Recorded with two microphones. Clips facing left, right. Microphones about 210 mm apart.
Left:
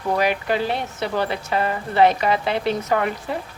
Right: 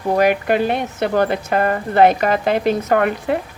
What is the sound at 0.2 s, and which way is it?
A woman's voice, 55° right (ahead or behind).